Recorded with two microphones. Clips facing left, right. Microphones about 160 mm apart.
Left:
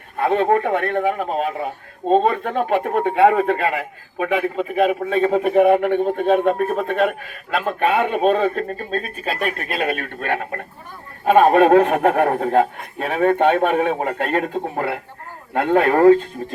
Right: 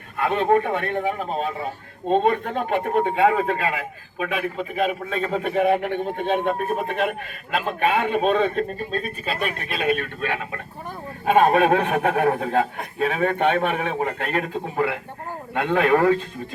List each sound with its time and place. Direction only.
0.3 s speech: 55° left (ahead or behind)
2.4 s a man's voice: 50° left (ahead or behind)
3.6 s a man's voice: 35° left (ahead or behind)
5.5 s a man's voice: 50° left (ahead or behind)